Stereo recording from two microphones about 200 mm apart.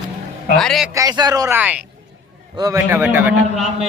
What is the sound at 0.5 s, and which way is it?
Speech, centre (ahead or behind).